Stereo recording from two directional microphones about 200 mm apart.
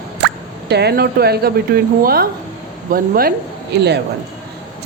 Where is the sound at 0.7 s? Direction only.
55° right (ahead or behind).